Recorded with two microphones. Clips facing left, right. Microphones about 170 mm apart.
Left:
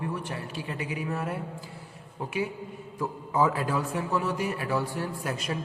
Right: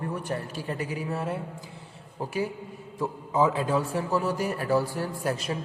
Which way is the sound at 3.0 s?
20° right (ahead or behind).